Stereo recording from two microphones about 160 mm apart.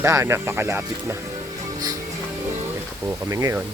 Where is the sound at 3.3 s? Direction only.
20° right (ahead or behind).